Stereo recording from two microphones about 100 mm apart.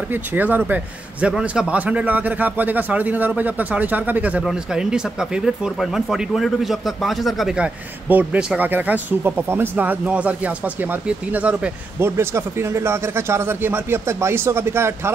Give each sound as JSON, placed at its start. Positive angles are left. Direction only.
{"t": 0.1, "sound": "speech", "side_deg": -20}
{"t": 12.2, "sound": "a man's voice", "side_deg": -25}